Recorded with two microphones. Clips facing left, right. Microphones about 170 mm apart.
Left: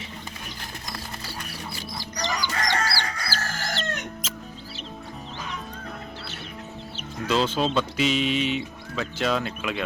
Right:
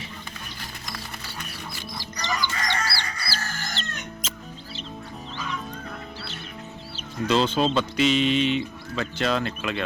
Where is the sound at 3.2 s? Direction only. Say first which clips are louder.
Left 2 dB; 85° left.